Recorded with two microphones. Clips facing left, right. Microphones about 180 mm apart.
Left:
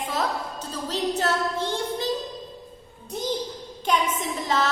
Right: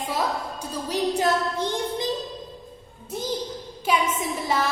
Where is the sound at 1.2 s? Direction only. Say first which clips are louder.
Right 2 dB; 15° right (ahead or behind).